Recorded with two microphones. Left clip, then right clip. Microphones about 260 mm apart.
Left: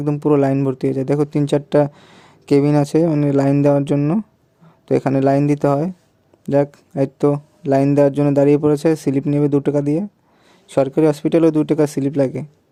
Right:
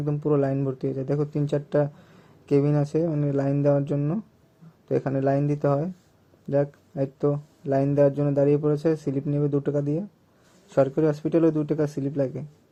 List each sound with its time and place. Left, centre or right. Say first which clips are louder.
0.0 s speech: left 8 dB; left